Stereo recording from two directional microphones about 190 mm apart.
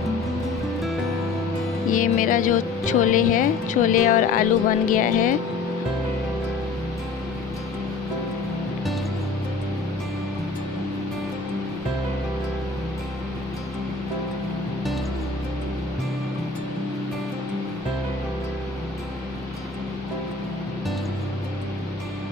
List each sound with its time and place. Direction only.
1.9 s speech: 45° left (ahead or behind)